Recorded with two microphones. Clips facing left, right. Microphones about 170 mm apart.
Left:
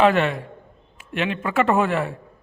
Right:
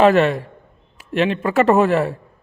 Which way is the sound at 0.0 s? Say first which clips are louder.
Right 4 dB; 40° right (ahead or behind).